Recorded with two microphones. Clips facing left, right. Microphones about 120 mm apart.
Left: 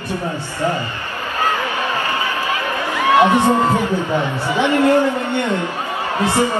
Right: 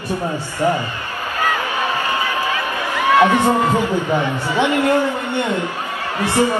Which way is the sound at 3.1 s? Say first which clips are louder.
Left 1 dB; 20° left (ahead or behind).